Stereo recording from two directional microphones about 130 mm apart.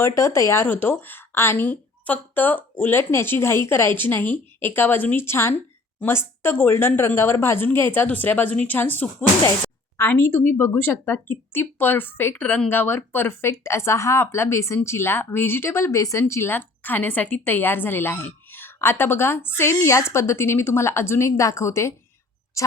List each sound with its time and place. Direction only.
0.0 s speech: 20° left (ahead or behind)